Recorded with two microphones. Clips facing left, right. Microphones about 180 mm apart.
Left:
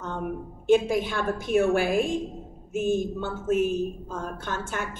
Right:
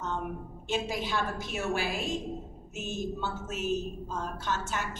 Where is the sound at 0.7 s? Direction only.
50° left (ahead or behind).